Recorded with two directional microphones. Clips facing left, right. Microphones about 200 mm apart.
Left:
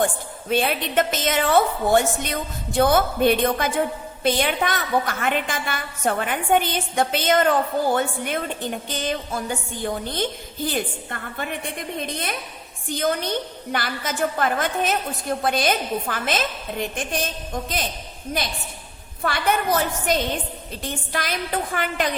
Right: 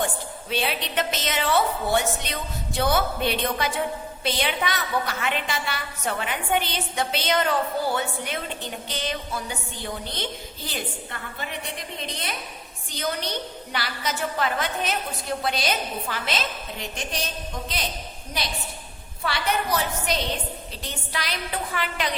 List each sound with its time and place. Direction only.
0.0 s a woman's voice: 50° left (ahead or behind)